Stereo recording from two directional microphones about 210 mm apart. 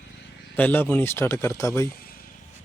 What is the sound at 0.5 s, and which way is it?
Speech, 10° left (ahead or behind).